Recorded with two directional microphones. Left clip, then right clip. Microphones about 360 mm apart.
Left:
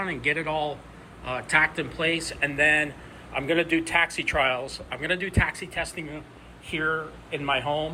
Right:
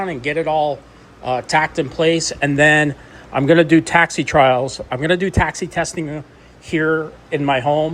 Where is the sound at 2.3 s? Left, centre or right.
Right.